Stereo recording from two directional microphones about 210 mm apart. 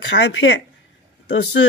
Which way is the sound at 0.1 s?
60° left (ahead or behind).